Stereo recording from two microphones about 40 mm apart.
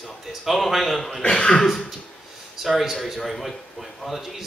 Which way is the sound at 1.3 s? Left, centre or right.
Centre.